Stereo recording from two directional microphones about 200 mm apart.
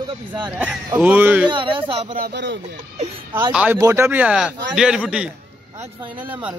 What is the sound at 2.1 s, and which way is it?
Speech, 55° right (ahead or behind).